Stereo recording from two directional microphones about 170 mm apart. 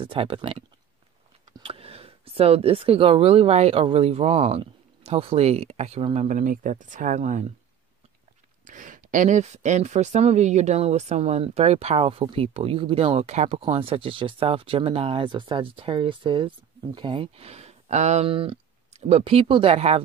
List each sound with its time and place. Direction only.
0.0 s speech: 30° right (ahead or behind)
6.2 s speech: 50° right (ahead or behind)
8.6 s speech: 50° right (ahead or behind)